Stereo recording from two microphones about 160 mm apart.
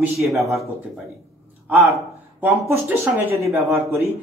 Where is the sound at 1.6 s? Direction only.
15° right (ahead or behind).